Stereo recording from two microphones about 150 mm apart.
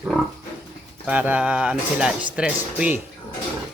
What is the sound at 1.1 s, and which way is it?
Speech, 10° right (ahead or behind).